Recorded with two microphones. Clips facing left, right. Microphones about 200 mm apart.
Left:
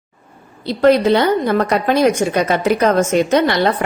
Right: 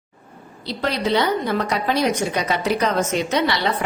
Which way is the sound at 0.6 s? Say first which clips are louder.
Left 11 dB; 50° left (ahead or behind).